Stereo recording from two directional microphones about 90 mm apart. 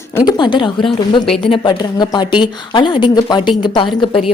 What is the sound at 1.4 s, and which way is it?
Speech, 80° left.